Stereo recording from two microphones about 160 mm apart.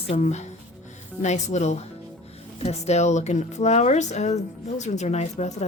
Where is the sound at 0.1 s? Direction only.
45° left (ahead or behind).